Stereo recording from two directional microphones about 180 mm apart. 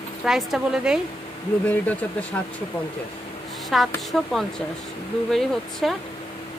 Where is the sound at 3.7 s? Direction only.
Centre (ahead or behind).